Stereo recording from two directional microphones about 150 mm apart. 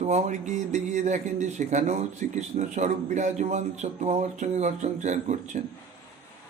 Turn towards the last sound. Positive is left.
turn(degrees=-50)  # may be behind; listen again after turning